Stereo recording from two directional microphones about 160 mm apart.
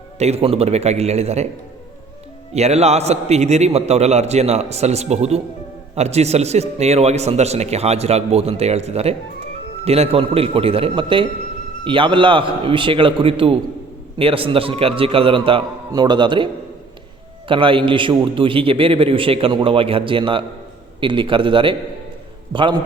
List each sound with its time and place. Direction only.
0.2 s a man's voice: 40° right (ahead or behind)
2.5 s a man's voice: 40° right (ahead or behind)
17.5 s a man's voice: 30° right (ahead or behind)